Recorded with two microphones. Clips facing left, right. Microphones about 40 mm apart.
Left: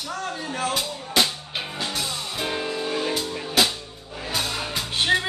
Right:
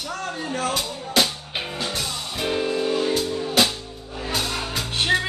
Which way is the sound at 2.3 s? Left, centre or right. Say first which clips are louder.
Right 5 dB; centre.